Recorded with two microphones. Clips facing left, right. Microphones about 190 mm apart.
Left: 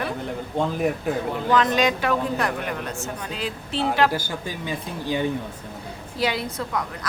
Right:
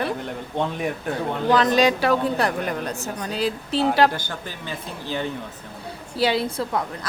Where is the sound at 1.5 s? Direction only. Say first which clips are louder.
Right 2 dB; 35° right (ahead or behind).